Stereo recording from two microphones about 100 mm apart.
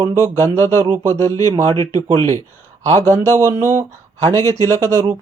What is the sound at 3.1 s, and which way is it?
Speech, 30° right (ahead or behind).